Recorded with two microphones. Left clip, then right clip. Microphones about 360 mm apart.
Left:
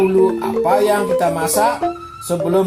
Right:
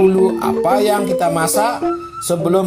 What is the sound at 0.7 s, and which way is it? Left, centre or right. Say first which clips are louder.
Music: left 1 dB; right.